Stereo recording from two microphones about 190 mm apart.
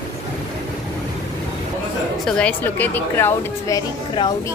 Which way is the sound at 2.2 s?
5° left (ahead or behind).